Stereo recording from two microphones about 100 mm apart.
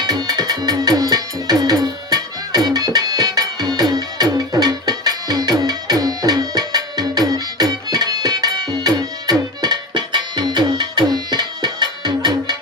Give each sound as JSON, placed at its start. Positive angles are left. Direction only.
{"t": 0.0, "sound": "music", "side_deg": -45}